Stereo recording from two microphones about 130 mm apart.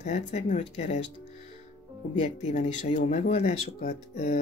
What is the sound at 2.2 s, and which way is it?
Speech, 60° left (ahead or behind).